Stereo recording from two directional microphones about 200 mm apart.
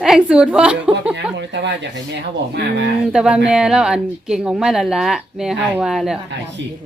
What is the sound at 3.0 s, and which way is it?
Speech, 5° right (ahead or behind).